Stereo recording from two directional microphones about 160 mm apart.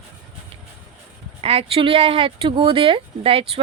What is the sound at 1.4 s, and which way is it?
Speech, 35° right (ahead or behind).